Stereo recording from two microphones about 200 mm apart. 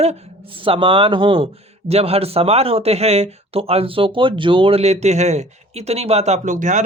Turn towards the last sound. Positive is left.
turn(degrees=-40)  # may be behind; listen again after turning